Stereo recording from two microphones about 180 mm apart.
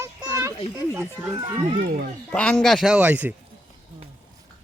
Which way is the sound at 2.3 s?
5° left (ahead or behind).